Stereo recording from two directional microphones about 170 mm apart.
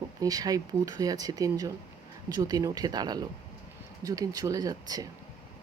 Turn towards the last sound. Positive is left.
turn(degrees=-20)  # may be behind; listen again after turning